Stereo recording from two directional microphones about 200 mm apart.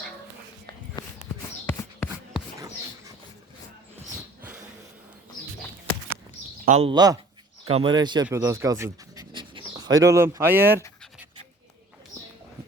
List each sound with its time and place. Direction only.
1.6 s a sound: 10° left (ahead or behind)
2.0 s writing: 5° right (ahead or behind)
6.7 s speech: 30° right (ahead or behind); by 10.8 s 10° right (ahead or behind)